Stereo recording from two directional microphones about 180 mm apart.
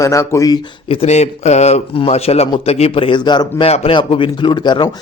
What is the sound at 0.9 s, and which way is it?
Speech, 35° left (ahead or behind).